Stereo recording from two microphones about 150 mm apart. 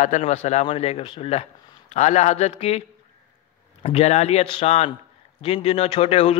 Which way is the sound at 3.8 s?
45° left (ahead or behind).